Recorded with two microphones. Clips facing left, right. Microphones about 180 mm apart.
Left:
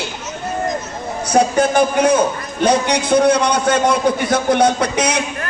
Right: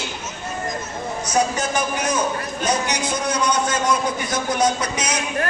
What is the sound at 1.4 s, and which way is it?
Speech, 55° left (ahead or behind).